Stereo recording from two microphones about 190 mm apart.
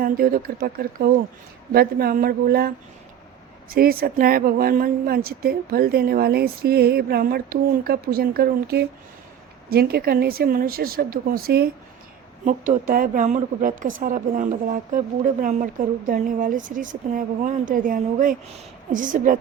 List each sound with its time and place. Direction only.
0.0 s speech: 50° right (ahead or behind)
12.5 s speech: 40° right (ahead or behind)